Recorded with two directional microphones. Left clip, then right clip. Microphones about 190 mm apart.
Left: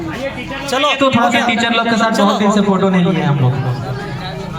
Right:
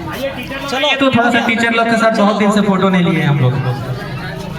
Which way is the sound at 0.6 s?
45° left (ahead or behind).